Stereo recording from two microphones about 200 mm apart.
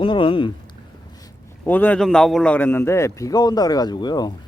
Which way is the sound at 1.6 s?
10° left (ahead or behind).